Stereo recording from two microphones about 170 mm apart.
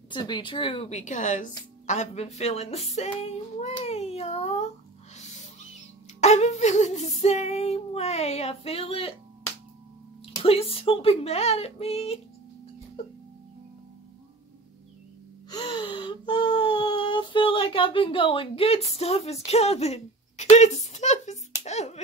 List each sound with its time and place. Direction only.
0.1 s female singing: 25° left (ahead or behind); by 1.5 s 45° left (ahead or behind)
1.9 s speech: 40° left (ahead or behind)
5.1 s owl: 45° left (ahead or behind)
6.2 s female singing: 40° left (ahead or behind)
10.4 s female singing: 35° left (ahead or behind)
15.5 s a sound: 30° left (ahead or behind)